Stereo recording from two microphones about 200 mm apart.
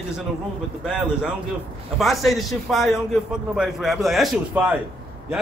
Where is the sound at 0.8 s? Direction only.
5° right (ahead or behind).